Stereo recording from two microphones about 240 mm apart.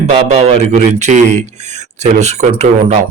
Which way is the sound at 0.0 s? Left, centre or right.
Right.